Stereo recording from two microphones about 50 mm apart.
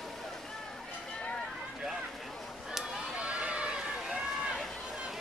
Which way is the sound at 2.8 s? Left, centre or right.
Centre.